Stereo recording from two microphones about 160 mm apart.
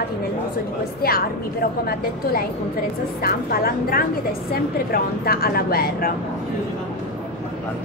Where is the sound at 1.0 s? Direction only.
70° left (ahead or behind).